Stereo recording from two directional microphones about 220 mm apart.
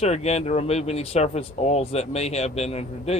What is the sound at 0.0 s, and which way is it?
Speech, 30° left (ahead or behind).